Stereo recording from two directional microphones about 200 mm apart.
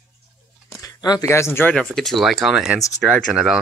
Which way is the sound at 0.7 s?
15° left (ahead or behind).